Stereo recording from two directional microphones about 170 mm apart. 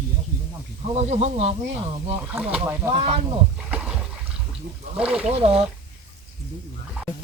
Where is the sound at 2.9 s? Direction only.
35° right (ahead or behind).